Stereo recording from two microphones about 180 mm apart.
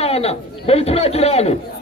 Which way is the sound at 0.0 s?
35° left (ahead or behind).